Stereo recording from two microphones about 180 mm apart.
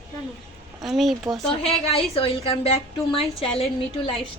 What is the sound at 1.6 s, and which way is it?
A woman's voice, 35° left (ahead or behind).